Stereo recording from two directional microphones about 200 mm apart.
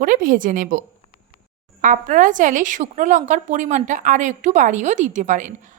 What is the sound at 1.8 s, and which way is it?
A woman's voice, 40° right (ahead or behind).